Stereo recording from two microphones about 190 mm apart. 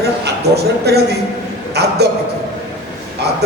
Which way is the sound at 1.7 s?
60° right (ahead or behind).